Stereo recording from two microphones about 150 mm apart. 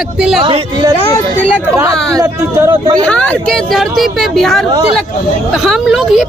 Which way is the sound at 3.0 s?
5° left (ahead or behind).